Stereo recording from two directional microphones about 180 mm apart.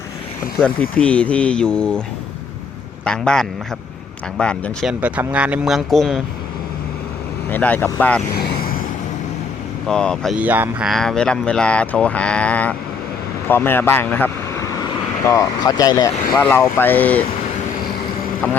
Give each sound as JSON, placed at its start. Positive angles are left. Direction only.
{"t": 0.6, "sound": "speech", "side_deg": 5}
{"t": 3.0, "sound": "a man's voice", "side_deg": 5}
{"t": 4.9, "sound": "speech", "side_deg": -10}
{"t": 7.5, "sound": "speech", "side_deg": 10}
{"t": 8.4, "sound": "vehicle", "side_deg": 55}
{"t": 9.8, "sound": "speech", "side_deg": 5}
{"t": 10.3, "sound": "speech", "side_deg": -10}